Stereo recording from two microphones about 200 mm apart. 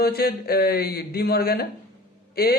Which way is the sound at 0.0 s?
50° left (ahead or behind).